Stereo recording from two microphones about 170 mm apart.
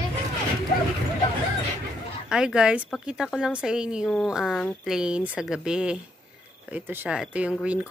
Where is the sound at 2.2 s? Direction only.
5° right (ahead or behind).